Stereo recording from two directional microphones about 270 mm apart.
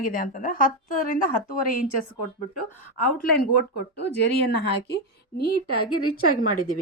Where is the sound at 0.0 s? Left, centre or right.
Left.